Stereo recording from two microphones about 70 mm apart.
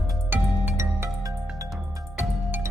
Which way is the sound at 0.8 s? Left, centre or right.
Right.